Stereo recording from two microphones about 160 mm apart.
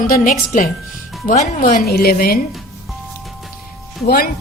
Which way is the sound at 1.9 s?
70° left (ahead or behind).